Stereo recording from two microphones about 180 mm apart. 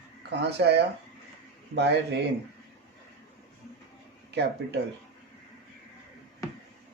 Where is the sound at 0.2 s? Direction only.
70° right (ahead or behind).